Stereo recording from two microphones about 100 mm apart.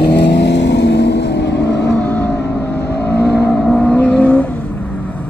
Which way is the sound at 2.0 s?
15° left (ahead or behind).